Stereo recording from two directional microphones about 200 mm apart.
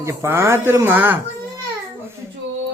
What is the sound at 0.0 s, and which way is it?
Speech, 15° right (ahead or behind).